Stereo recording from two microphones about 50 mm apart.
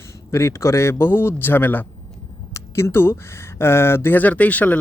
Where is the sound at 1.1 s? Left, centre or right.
Left.